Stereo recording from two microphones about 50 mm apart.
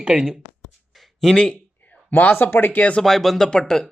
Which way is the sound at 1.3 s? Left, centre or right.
Centre.